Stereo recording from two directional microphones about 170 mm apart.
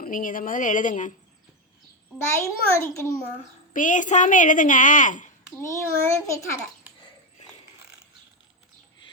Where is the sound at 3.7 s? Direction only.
50° left (ahead or behind).